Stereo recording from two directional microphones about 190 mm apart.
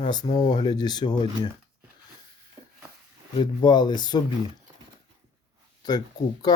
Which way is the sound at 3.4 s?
20° left (ahead or behind).